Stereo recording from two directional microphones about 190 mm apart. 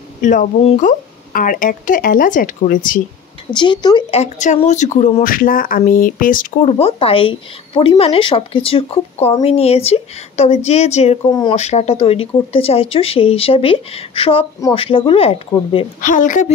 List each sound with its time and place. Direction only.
0.2 s speech: 40° left (ahead or behind)
3.4 s speech: 25° left (ahead or behind)
4.2 s speech: 35° left (ahead or behind)
6.8 s speech: 30° left (ahead or behind)
16.0 s speech: 45° left (ahead or behind)